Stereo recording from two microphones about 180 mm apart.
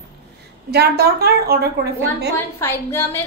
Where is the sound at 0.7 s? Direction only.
60° right (ahead or behind).